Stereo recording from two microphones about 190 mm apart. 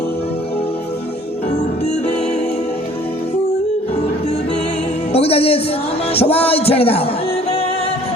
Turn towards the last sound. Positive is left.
turn(degrees=30)  # may be behind; listen again after turning